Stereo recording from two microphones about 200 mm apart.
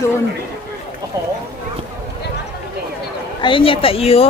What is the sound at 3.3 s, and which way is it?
Speech, 25° left (ahead or behind).